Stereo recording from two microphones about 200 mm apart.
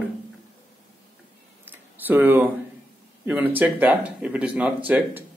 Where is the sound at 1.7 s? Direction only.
10° right (ahead or behind).